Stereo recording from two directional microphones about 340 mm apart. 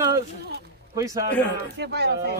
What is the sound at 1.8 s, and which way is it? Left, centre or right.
Speech, right.